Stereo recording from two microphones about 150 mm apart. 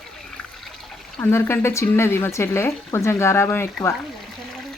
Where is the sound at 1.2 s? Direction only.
15° left (ahead or behind).